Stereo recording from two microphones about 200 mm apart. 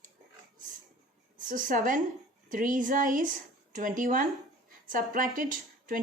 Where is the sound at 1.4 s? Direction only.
40° right (ahead or behind).